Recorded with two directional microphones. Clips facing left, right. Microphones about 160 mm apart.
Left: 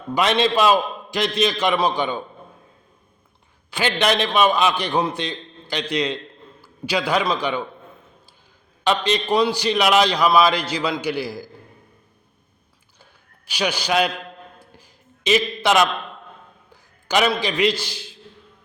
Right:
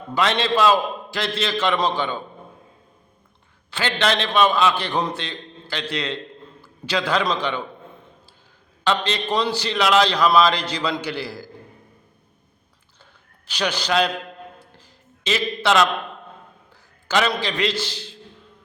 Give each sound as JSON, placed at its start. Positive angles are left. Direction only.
{"t": 0.1, "sound": "a man's voice", "side_deg": 15}
{"t": 3.7, "sound": "a man's voice", "side_deg": 15}
{"t": 8.8, "sound": "a man's voice", "side_deg": 15}
{"t": 13.5, "sound": "a man's voice", "side_deg": 10}
{"t": 14.7, "sound": "a sound", "side_deg": 15}
{"t": 17.1, "sound": "a man's voice", "side_deg": 15}